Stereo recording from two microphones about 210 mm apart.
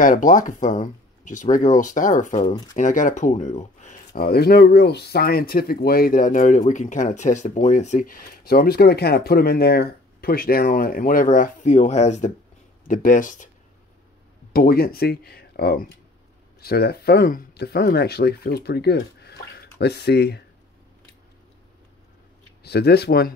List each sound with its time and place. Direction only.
0.0 s speech: 40° left (ahead or behind)
4.1 s speech: 50° left (ahead or behind)
14.5 s speech: 45° left (ahead or behind)
22.6 s speech: 50° left (ahead or behind)